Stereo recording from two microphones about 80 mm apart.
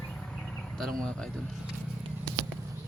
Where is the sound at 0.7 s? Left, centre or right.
Centre.